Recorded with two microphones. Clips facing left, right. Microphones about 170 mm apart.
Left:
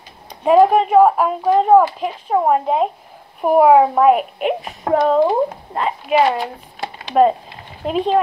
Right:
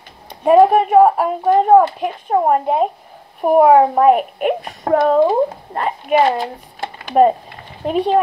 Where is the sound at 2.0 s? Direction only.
50° right (ahead or behind).